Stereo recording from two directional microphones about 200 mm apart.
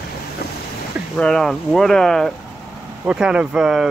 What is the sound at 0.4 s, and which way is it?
Boat, 50° left (ahead or behind).